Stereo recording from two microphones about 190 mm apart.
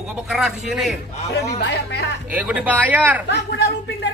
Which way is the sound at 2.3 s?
5° right (ahead or behind).